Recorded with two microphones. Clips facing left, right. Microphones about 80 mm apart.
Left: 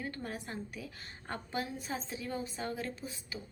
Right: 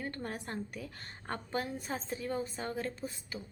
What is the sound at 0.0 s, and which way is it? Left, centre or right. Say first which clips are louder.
A woman's voice: right 1 dB; right.